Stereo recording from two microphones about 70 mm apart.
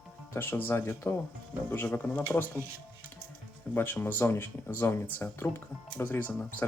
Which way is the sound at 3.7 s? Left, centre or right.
Left.